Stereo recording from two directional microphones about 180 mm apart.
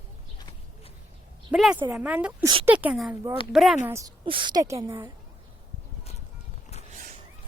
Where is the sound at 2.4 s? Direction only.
30° right (ahead or behind).